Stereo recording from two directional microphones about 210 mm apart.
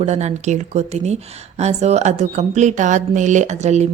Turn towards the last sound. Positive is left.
turn(degrees=-35)  # may be behind; listen again after turning